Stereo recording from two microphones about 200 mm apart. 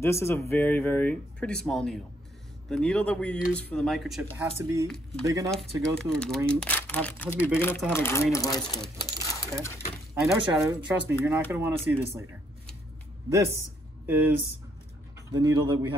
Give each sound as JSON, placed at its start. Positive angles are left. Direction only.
{"t": 0.0, "sound": "speech", "side_deg": 15}
{"t": 4.4, "sound": "speech", "side_deg": -15}
{"t": 4.8, "sound": "speech", "side_deg": 0}
{"t": 5.2, "sound": "speech", "side_deg": -15}
{"t": 5.5, "sound": "speech", "side_deg": 5}
{"t": 10.2, "sound": "speech", "side_deg": -15}
{"t": 14.0, "sound": "speech", "side_deg": -10}
{"t": 15.4, "sound": "speech", "side_deg": -20}